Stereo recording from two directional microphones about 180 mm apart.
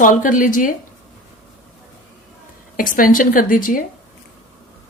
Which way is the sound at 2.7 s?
50° left (ahead or behind).